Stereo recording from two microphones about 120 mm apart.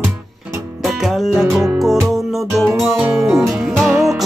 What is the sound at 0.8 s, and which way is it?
Music, centre (ahead or behind).